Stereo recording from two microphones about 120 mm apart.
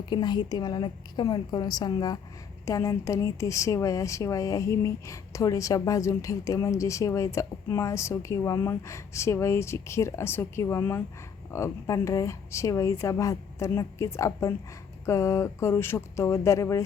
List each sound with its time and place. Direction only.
0.0 s a woman's voice: 35° left (ahead or behind)